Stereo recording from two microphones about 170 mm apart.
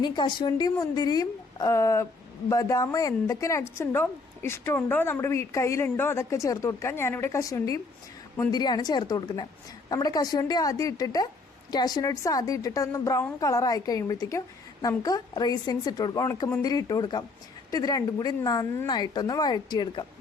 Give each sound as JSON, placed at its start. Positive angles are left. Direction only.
{"t": 0.0, "sound": "a woman's voice", "side_deg": 25}